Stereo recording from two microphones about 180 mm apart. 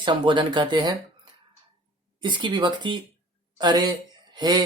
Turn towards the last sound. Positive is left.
turn(degrees=-25)  # may be behind; listen again after turning